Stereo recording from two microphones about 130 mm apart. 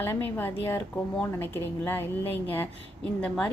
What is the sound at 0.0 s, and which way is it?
A woman's voice, 15° left (ahead or behind).